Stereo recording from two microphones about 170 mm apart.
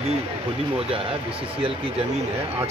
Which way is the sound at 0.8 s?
35° right (ahead or behind).